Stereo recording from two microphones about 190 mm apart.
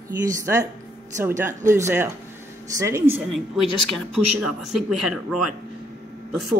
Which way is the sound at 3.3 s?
Centre (ahead or behind).